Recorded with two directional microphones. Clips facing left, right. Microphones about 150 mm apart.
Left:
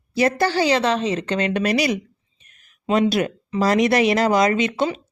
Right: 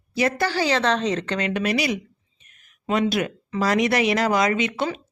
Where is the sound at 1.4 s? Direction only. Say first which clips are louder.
Left 4 dB; 35° left (ahead or behind).